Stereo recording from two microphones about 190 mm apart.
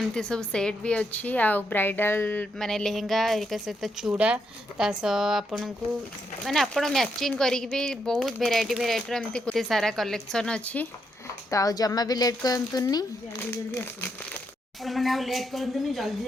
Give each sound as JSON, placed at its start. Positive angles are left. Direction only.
{"t": 0.0, "sound": "a woman's voice", "side_deg": 5}
{"t": 11.5, "sound": "speech", "side_deg": 20}
{"t": 14.8, "sound": "a woman's voice", "side_deg": 0}